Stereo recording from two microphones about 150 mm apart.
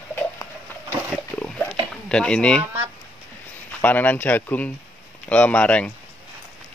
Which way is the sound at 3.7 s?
10° left (ahead or behind).